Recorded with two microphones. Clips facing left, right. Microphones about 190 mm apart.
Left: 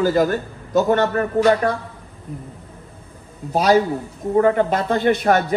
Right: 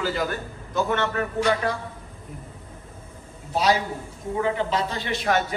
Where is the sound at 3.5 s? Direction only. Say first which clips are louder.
Left 7 dB; 45° left (ahead or behind).